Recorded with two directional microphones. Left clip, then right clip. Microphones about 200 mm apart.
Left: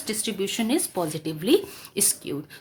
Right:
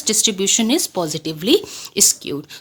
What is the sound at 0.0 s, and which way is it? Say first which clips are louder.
Speech: right 10 dB; 45° right (ahead or behind).